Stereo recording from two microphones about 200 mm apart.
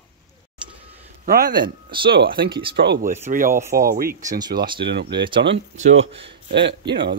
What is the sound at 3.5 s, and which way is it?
Speech, 15° right (ahead or behind).